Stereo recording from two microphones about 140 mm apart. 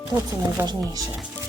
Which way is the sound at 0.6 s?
30° right (ahead or behind).